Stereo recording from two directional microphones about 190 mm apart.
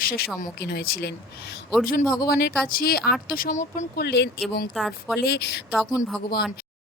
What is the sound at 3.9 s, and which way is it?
Speech, 60° left (ahead or behind).